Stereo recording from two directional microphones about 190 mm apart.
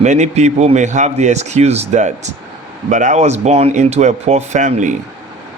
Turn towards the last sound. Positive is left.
turn(degrees=-40)  # may be behind; listen again after turning